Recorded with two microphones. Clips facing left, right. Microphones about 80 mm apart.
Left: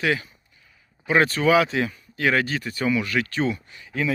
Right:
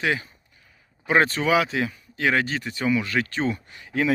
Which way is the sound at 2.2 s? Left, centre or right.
Centre.